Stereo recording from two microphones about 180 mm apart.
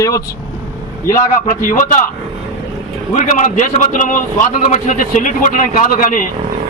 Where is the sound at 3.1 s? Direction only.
40° left (ahead or behind).